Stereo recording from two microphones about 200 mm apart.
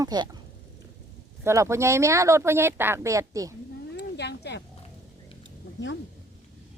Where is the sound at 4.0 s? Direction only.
55° left (ahead or behind).